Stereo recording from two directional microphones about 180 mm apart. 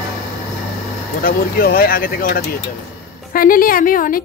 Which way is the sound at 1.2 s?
55° left (ahead or behind).